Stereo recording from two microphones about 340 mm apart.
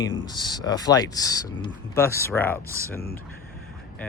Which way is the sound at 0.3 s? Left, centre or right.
Centre.